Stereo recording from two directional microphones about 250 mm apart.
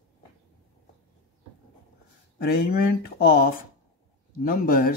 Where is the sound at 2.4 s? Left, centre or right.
Left.